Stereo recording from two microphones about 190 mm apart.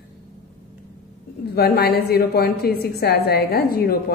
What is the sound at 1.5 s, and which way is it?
A woman's voice, 55° left (ahead or behind).